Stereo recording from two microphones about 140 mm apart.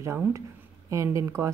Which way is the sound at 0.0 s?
20° right (ahead or behind).